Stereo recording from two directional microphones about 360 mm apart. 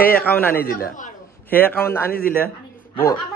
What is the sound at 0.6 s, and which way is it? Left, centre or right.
Speech, left.